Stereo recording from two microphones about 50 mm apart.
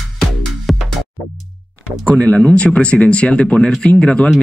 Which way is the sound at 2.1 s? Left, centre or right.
Left.